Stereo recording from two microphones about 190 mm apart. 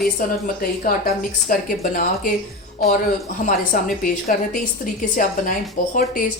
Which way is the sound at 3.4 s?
45° left (ahead or behind).